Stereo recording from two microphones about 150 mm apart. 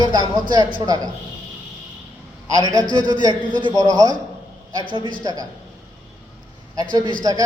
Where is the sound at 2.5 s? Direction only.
25° right (ahead or behind).